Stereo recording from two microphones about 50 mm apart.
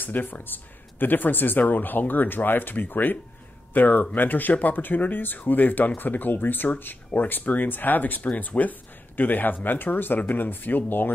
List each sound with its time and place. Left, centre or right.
0.0 s speech: left